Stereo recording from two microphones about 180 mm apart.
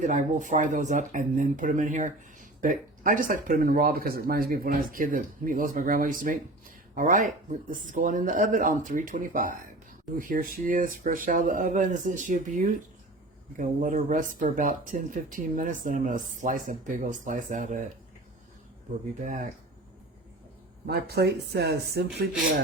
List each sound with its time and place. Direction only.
0.0 s speech: 45° right (ahead or behind)
19.2 s speech: 45° right (ahead or behind)
20.8 s speech: 60° right (ahead or behind)